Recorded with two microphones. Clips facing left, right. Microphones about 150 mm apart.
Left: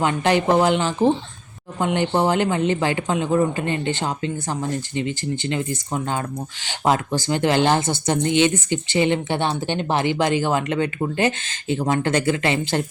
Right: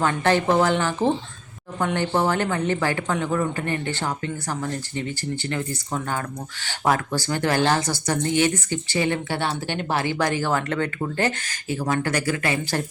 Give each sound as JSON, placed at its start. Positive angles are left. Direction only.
{"t": 0.0, "sound": "speech", "side_deg": 15}